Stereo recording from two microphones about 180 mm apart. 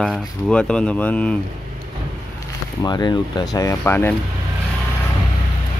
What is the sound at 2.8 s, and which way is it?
Speech, 25° left (ahead or behind).